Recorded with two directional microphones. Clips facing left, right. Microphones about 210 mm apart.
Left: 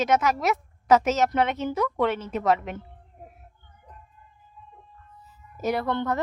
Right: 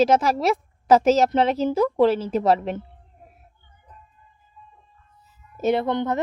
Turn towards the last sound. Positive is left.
turn(degrees=-20)  # may be behind; listen again after turning